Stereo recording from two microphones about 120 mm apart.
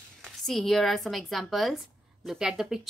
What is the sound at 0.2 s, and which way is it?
A woman's voice, centre (ahead or behind).